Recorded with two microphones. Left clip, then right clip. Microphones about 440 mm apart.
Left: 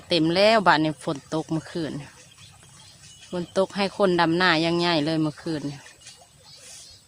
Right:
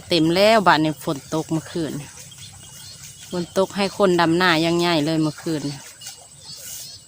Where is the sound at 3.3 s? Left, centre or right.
Left.